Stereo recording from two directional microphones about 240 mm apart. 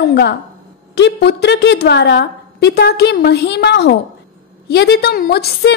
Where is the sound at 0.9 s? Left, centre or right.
Left.